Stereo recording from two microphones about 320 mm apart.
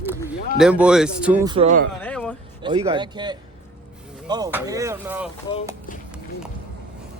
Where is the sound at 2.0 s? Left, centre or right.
Centre.